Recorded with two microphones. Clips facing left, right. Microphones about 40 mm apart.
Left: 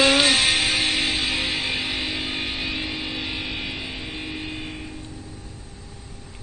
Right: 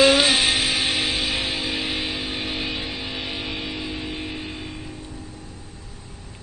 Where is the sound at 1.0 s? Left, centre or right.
Centre.